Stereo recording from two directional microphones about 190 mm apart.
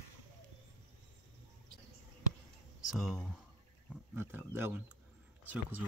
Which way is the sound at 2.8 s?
Centre (ahead or behind).